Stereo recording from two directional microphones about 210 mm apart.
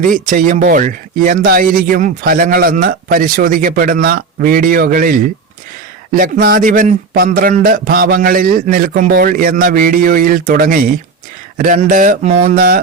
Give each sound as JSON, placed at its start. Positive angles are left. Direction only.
{"t": 0.0, "sound": "speech", "side_deg": -40}